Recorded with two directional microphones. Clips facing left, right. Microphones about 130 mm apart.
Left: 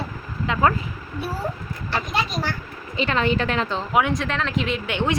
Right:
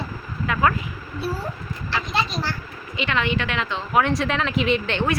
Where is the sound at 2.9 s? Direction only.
35° left (ahead or behind).